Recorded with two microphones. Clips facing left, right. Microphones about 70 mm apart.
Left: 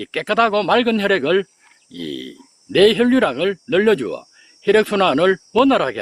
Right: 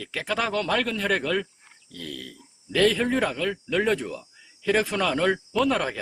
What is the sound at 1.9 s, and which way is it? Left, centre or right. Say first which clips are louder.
Speech: left 10 dB; left.